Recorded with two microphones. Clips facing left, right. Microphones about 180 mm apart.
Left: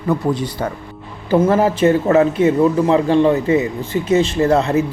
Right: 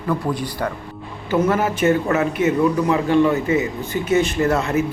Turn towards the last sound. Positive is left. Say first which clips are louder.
# left 4 dB
turn(degrees=35)  # may be behind; listen again after turning